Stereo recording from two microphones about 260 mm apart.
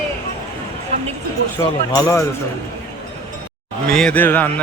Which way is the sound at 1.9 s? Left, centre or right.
Centre.